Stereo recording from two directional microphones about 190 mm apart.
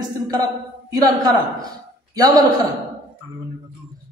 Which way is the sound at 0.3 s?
20° right (ahead or behind).